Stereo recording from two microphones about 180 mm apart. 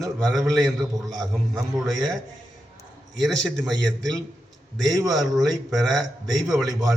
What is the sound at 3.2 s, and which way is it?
A man's voice, 5° left (ahead or behind).